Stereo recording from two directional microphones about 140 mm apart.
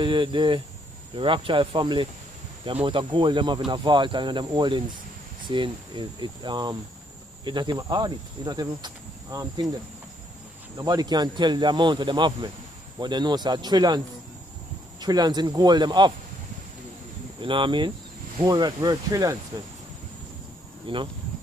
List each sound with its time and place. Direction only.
0.0 s cricket: 35° right (ahead or behind)
10.8 s cricket: 30° right (ahead or behind)
15.0 s speech: 30° right (ahead or behind)
17.4 s cricket: 35° right (ahead or behind)
18.4 s speech: 30° right (ahead or behind)
20.8 s cricket: 35° right (ahead or behind)